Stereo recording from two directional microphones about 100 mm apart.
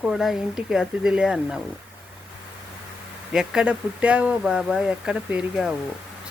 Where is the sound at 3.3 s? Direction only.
5° right (ahead or behind).